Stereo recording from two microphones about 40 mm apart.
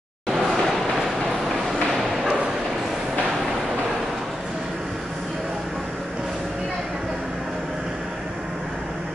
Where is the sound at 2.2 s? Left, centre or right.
Right.